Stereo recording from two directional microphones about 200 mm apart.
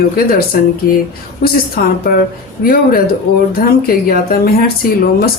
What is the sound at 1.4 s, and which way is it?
Speech, 50° left (ahead or behind).